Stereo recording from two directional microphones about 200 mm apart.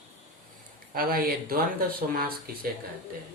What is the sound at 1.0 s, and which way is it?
Speech, 45° right (ahead or behind).